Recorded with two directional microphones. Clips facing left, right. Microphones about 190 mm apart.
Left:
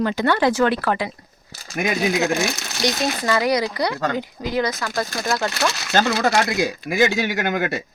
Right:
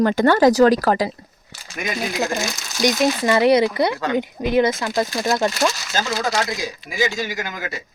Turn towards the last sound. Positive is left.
turn(degrees=60)  # may be behind; listen again after turning